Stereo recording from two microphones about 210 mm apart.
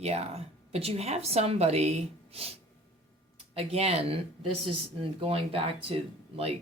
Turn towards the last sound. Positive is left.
turn(degrees=-25)  # may be behind; listen again after turning